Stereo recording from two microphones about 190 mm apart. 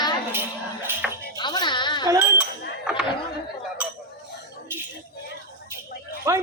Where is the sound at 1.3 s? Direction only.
20° left (ahead or behind).